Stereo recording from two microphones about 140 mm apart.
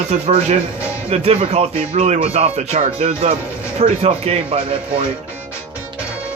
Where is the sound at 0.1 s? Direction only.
50° right (ahead or behind).